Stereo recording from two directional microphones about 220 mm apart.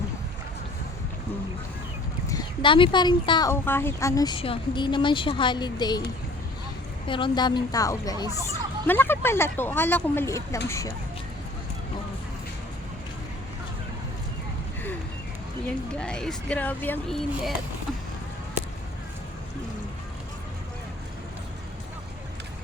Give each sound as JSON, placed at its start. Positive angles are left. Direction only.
{"t": 2.2, "sound": "speech", "side_deg": 20}
{"t": 7.1, "sound": "speech", "side_deg": 20}
{"t": 16.0, "sound": "speech", "side_deg": 5}